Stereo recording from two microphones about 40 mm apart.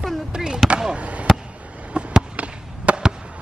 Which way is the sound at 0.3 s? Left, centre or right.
Centre.